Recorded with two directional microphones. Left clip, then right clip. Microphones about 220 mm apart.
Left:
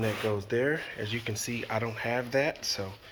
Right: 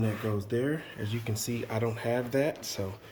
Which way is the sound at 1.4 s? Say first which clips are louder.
Right 2 dB; centre (ahead or behind).